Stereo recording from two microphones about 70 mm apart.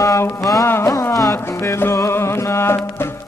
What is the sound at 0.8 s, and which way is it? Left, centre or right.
Carnatic music, left.